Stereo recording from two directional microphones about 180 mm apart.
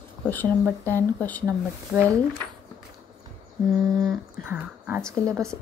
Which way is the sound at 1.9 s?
Centre (ahead or behind).